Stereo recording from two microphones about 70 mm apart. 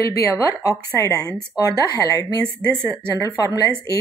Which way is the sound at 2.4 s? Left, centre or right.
Right.